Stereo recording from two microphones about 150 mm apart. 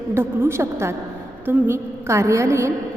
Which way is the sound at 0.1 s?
15° right (ahead or behind).